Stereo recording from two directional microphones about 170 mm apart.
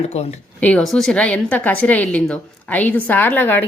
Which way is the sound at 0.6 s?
5° left (ahead or behind).